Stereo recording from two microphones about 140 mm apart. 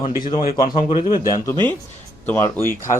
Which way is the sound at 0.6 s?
40° left (ahead or behind).